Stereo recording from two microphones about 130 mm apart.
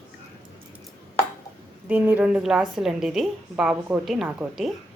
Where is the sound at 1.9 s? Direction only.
10° right (ahead or behind).